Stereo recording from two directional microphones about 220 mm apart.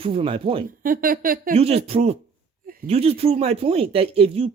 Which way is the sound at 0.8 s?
40° right (ahead or behind).